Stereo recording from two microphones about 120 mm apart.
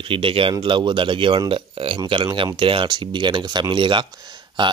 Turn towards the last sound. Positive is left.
turn(degrees=-40)  # may be behind; listen again after turning